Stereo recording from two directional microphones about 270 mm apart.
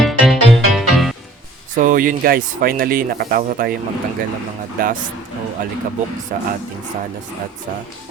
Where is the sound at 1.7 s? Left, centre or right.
Right.